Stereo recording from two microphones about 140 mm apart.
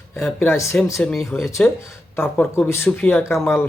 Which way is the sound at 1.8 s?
15° left (ahead or behind).